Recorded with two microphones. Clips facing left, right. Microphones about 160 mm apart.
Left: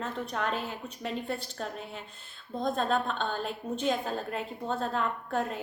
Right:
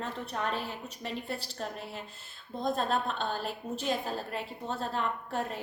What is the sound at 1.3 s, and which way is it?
Speech, 35° right (ahead or behind).